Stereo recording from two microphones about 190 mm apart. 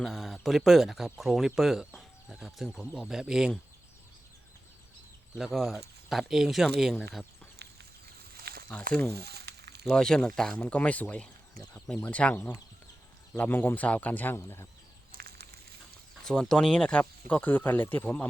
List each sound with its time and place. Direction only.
0.0 s speech: centre (ahead or behind)
5.4 s speech: centre (ahead or behind)
8.9 s speech: 5° left (ahead or behind)
9.1 s frying: 60° right (ahead or behind)
9.9 s speech: 5° left (ahead or behind)
15.1 s a sound: 55° right (ahead or behind)
16.2 s speech: 5° left (ahead or behind)